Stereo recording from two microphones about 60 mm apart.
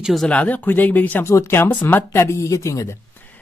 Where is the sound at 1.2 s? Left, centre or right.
Left.